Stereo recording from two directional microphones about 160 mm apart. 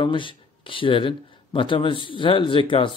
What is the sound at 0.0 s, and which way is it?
Speech, 30° left (ahead or behind).